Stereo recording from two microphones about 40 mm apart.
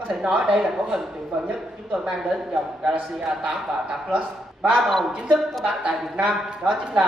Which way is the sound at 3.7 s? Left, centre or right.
Centre.